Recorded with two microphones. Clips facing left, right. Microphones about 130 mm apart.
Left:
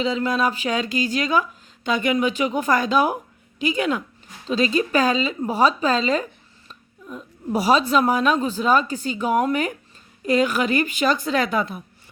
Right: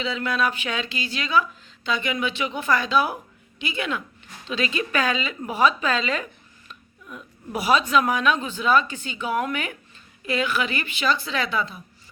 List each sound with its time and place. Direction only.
0.0 s speech: 40° left (ahead or behind)